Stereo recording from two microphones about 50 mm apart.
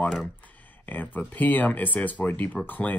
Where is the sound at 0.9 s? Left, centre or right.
Left.